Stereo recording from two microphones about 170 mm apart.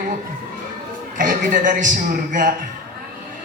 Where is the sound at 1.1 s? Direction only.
50° right (ahead or behind).